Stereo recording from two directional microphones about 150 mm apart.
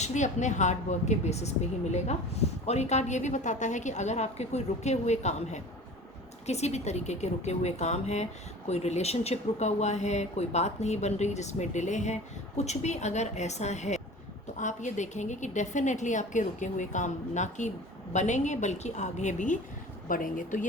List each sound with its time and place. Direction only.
0.0 s a woman's voice: 55° left (ahead or behind)